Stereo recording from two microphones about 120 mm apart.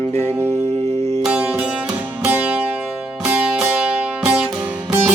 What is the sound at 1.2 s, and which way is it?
Music, 10° right (ahead or behind).